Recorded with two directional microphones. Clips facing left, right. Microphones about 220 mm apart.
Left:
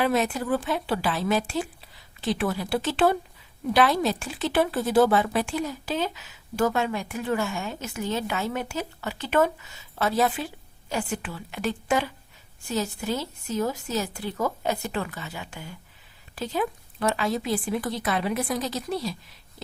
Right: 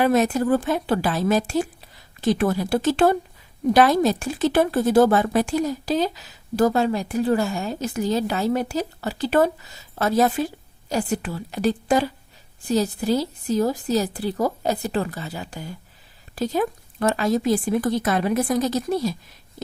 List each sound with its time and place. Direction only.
0.0 s a woman's voice: 45° right (ahead or behind)